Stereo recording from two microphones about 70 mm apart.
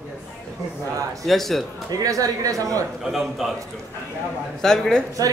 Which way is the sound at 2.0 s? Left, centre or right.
Right.